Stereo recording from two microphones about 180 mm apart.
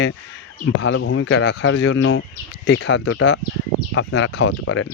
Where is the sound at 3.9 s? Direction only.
90° left.